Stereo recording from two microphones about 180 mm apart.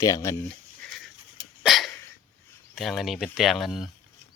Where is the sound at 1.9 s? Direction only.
15° left (ahead or behind).